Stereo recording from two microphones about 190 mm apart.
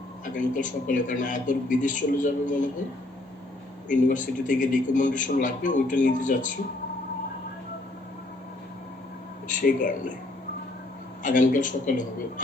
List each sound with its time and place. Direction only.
0.3 s a man's voice: 45° left (ahead or behind)
3.8 s a man's voice: 45° left (ahead or behind)
9.5 s speech: 45° left (ahead or behind)
11.2 s a man's voice: 45° left (ahead or behind)